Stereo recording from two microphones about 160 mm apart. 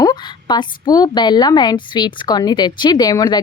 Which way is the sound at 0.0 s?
25° left (ahead or behind).